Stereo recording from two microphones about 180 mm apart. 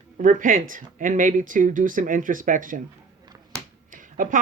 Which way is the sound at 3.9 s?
50° right (ahead or behind).